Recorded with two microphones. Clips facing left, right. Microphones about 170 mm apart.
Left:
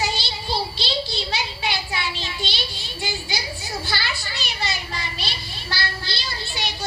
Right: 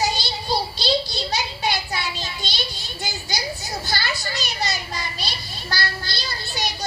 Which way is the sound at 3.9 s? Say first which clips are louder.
Right 2 dB; 40° right (ahead or behind).